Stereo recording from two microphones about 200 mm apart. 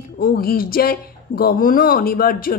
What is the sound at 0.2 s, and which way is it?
Speech, 45° left (ahead or behind).